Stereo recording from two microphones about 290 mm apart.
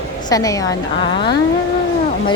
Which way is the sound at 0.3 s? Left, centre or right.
Centre.